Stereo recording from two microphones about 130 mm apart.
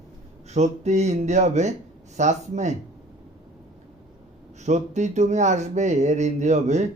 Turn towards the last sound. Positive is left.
turn(degrees=-65)  # may be behind; listen again after turning